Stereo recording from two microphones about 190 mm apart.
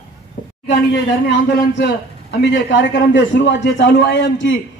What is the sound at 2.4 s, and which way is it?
A man's voice, 65° left (ahead or behind).